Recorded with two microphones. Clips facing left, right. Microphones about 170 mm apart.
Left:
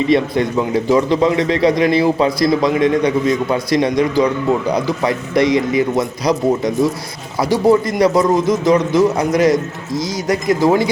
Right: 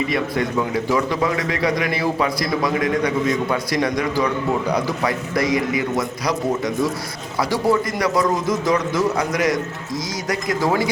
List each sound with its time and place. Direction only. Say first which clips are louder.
0.1 s a man's voice: left 7 dB; 25° left (ahead or behind)